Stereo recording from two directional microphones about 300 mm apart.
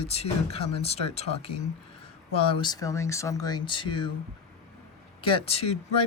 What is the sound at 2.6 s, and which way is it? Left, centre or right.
Speech, centre.